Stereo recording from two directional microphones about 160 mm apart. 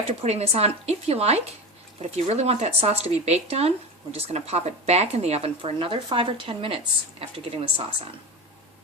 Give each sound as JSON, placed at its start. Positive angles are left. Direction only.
{"t": 0.1, "sound": "speech", "side_deg": -40}